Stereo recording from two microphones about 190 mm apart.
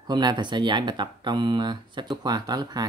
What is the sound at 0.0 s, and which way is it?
Speech, 20° right (ahead or behind).